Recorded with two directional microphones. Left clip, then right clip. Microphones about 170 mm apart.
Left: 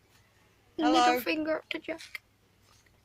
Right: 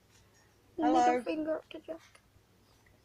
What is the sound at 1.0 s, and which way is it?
Speech, 35° right (ahead or behind).